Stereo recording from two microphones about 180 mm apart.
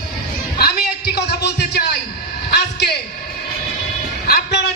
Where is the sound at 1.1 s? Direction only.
70° left (ahead or behind).